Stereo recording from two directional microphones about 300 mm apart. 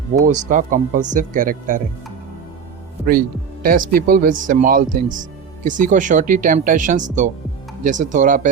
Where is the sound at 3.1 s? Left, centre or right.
Right.